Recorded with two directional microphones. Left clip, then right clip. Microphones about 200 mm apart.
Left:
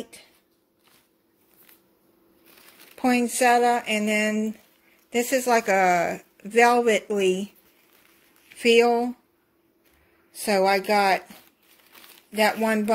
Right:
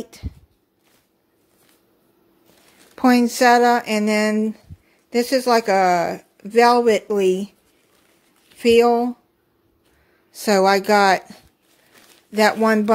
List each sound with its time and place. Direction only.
3.0 s speech: 30° right (ahead or behind)
8.5 s speech: 15° right (ahead or behind)
10.3 s speech: 30° right (ahead or behind)